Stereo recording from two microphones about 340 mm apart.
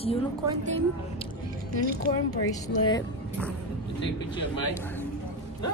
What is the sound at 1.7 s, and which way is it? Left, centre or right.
Speech, right.